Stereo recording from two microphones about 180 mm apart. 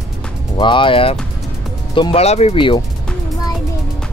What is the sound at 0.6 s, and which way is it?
Speech, 25° left (ahead or behind).